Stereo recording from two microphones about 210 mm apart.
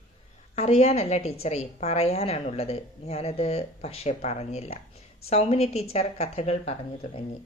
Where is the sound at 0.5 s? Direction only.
30° left (ahead or behind).